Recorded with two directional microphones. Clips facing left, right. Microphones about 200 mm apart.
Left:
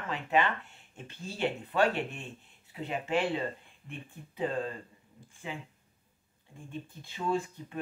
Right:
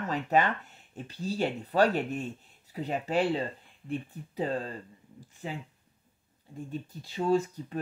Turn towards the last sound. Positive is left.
turn(degrees=-40)  # may be behind; listen again after turning